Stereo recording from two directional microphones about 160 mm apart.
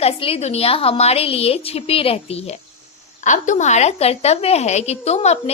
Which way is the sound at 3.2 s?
50° left (ahead or behind).